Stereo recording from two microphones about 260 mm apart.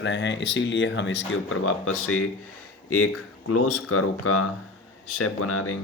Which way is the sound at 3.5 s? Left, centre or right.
Left.